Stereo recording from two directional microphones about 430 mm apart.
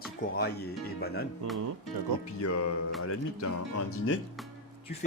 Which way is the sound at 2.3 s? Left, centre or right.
Left.